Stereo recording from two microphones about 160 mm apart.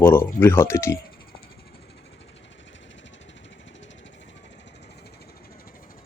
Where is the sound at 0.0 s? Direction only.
15° left (ahead or behind).